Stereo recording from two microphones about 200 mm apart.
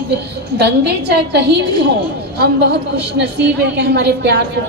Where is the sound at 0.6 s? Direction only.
55° right (ahead or behind).